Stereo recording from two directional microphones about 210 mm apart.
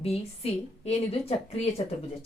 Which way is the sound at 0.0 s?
30° left (ahead or behind).